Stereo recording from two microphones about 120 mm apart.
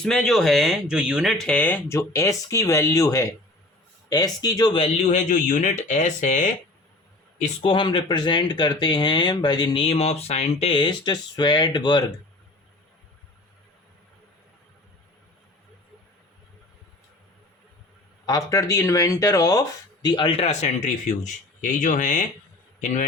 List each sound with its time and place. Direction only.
0.0 s speech: 5° left (ahead or behind); by 4.7 s 35° left (ahead or behind)
5.1 s speech: 90° left
7.6 s speech: 40° left (ahead or behind)
9.8 s speech: 55° left (ahead or behind)
10.8 s speech: 40° left (ahead or behind)
18.3 s speech: 30° left (ahead or behind)
20.3 s speech: 65° left (ahead or behind)
21.6 s speech: 90° left